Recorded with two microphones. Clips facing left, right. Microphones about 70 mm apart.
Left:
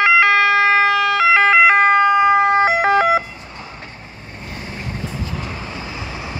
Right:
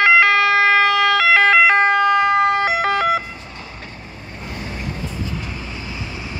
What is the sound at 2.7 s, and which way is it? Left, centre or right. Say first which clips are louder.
Siren: left 3 dB; left.